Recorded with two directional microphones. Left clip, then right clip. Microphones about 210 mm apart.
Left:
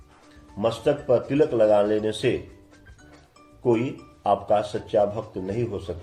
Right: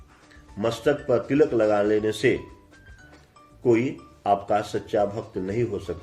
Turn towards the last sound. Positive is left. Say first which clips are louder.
# right 2 dB
turn(degrees=-35)  # may be behind; listen again after turning